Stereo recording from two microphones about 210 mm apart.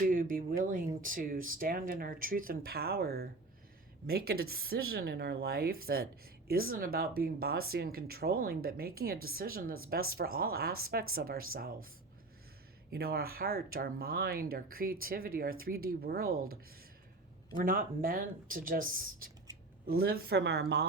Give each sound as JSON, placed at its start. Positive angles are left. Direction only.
{"t": 0.0, "sound": "a woman's voice", "side_deg": -40}
{"t": 12.9, "sound": "a woman's voice", "side_deg": -45}
{"t": 17.6, "sound": "a woman's voice", "side_deg": -40}